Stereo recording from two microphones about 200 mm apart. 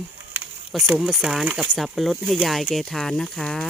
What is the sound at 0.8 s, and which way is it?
Speech, 5° right (ahead or behind).